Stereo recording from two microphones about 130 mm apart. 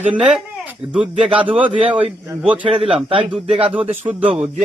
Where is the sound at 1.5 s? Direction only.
40° right (ahead or behind).